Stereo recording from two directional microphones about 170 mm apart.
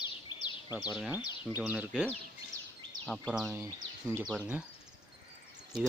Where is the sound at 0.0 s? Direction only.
25° left (ahead or behind).